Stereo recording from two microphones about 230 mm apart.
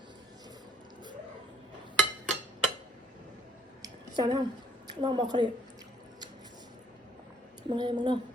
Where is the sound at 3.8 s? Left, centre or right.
Centre.